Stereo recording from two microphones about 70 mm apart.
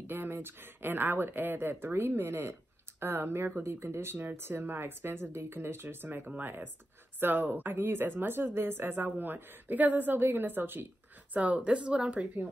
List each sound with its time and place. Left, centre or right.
0.0 s a woman's voice: right; by 12.3 s centre